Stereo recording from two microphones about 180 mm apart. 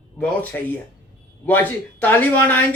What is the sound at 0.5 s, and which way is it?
Speech, 10° left (ahead or behind).